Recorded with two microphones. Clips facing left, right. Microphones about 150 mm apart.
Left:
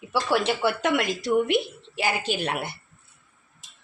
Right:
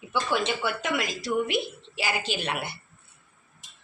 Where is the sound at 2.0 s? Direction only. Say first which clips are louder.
Left 4 dB; 50° left (ahead or behind).